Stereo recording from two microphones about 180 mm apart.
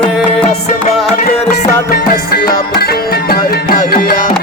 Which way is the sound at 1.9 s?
60° left (ahead or behind).